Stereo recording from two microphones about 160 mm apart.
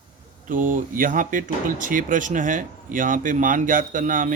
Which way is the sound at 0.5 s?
55° right (ahead or behind).